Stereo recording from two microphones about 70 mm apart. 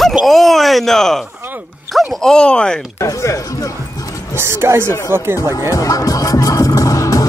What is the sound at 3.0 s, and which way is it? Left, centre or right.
Speech, left.